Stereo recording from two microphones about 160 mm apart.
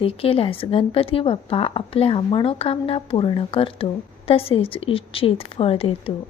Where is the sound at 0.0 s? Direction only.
35° left (ahead or behind).